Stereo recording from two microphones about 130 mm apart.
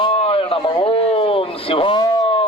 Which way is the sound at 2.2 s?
45° left (ahead or behind).